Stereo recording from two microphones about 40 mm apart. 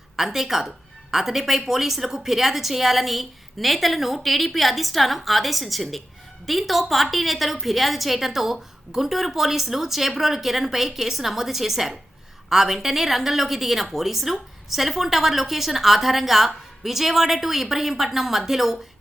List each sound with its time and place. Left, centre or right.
0.2 s a woman's voice: centre